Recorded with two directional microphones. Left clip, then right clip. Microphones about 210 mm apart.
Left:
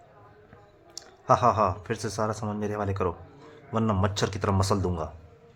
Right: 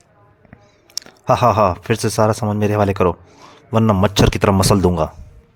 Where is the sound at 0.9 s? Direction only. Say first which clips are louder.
Right 6 dB; 45° right (ahead or behind).